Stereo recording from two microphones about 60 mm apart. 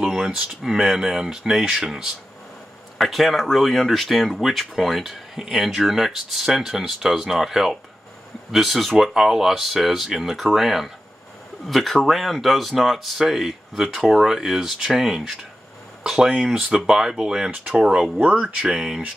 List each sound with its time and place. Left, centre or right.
0.0 s speech: centre
18.2 s speech: right
18.6 s speech: centre